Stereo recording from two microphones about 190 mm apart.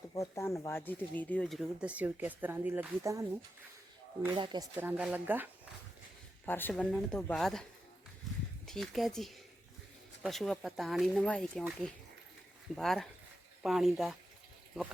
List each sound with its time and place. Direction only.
0.1 s speech: 15° left (ahead or behind); by 3.2 s 15° right (ahead or behind)
4.3 s speech: 25° right (ahead or behind)
4.8 s speech: 10° right (ahead or behind)
6.4 s speech: 10° left (ahead or behind)
8.6 s speech: centre (ahead or behind)
12.7 s speech: centre (ahead or behind)